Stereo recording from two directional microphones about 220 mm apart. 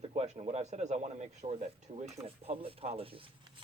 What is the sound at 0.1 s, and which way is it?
Speech, 30° right (ahead or behind).